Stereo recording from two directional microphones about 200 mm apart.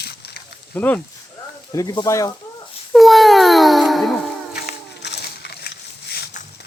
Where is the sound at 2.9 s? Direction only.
Centre (ahead or behind).